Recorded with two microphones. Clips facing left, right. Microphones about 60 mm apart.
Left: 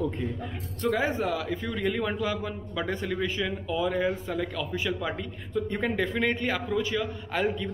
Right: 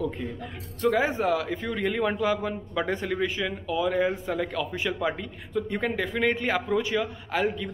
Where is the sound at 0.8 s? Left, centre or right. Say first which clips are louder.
Right 3 dB; centre.